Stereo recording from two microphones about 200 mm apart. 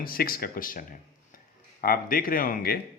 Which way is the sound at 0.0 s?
45° left (ahead or behind).